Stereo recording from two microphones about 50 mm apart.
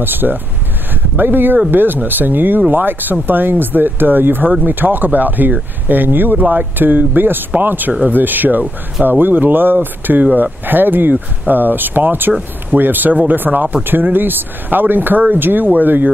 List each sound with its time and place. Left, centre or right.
0.0 s speech: right
6.4 s speech: right
6.8 s speech: right